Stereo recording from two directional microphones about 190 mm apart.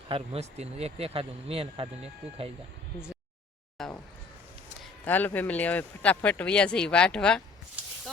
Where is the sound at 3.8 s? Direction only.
Centre (ahead or behind).